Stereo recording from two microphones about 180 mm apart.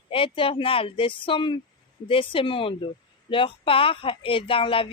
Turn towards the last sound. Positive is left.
turn(degrees=30)  # may be behind; listen again after turning